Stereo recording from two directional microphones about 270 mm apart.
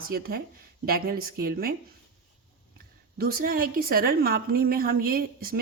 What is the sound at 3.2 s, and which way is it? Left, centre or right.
A woman's voice, right.